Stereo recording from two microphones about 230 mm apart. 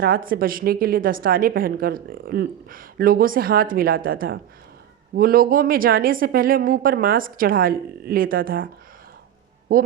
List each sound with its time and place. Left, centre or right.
0.0 s a woman's voice: right